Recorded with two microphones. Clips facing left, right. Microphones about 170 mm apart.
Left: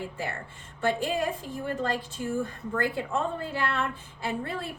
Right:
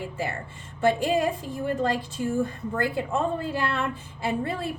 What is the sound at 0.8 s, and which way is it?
A woman's voice, 15° right (ahead or behind).